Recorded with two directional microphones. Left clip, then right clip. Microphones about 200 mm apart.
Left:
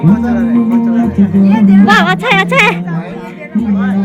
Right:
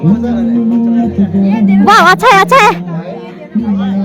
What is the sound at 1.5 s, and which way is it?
Speech, 30° right (ahead or behind).